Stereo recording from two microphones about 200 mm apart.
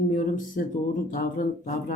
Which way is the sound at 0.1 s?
40° left (ahead or behind).